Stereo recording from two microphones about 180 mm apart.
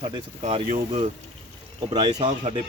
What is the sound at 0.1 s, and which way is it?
Speech, 35° right (ahead or behind).